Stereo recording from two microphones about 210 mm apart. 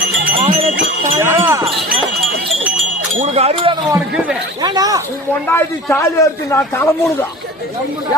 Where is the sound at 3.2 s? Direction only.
30° right (ahead or behind).